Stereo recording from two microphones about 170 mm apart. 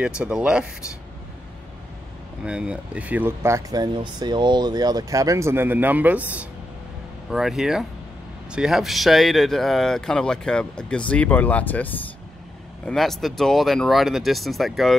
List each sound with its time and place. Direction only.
0.0 s a man's voice: 5° right (ahead or behind)
2.4 s a man's voice: 5° right (ahead or behind)